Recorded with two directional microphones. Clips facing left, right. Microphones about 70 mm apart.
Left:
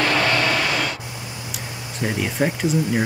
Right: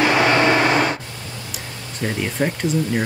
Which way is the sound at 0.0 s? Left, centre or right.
Centre.